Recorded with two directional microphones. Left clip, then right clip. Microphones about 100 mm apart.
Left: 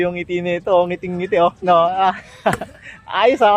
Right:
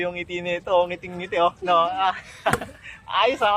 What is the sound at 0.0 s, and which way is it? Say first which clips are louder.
Speech: left 7 dB; 55° left (ahead or behind).